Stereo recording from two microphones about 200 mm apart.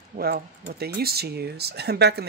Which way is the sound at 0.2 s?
50° right (ahead or behind).